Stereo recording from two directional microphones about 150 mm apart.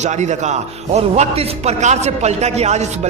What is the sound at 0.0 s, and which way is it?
A man's voice, 50° right (ahead or behind).